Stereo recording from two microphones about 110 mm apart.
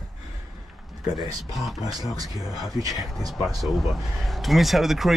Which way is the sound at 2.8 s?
35° right (ahead or behind).